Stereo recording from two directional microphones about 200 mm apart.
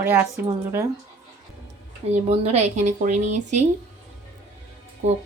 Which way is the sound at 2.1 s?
35° right (ahead or behind).